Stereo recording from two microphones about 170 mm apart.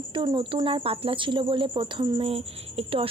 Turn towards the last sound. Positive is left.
turn(degrees=-35)  # may be behind; listen again after turning